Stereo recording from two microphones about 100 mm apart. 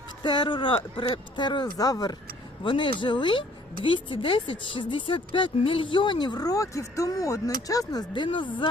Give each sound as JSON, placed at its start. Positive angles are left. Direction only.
{"t": 0.2, "sound": "speech", "side_deg": 55}
{"t": 2.6, "sound": "speech", "side_deg": 55}
{"t": 8.1, "sound": "speech", "side_deg": 55}